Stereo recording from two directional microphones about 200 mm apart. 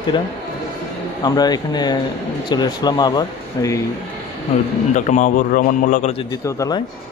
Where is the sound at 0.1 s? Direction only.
25° left (ahead or behind).